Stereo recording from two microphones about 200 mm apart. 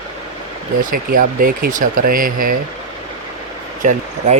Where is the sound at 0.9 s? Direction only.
45° right (ahead or behind).